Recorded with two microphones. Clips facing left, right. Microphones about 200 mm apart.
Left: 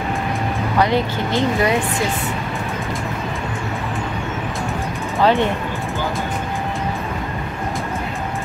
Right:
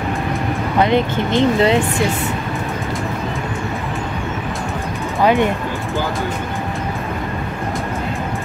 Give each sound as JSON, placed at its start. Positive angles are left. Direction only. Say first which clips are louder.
{"t": 0.7, "sound": "speech", "louder": "right 3 dB", "side_deg": -20}
{"t": 5.2, "sound": "speech", "louder": "right 1 dB", "side_deg": -15}